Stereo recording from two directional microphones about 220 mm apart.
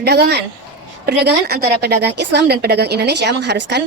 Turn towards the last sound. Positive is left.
turn(degrees=-50)  # may be behind; listen again after turning